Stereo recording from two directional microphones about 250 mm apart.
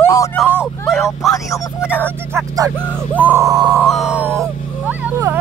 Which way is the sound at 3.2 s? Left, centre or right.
Centre.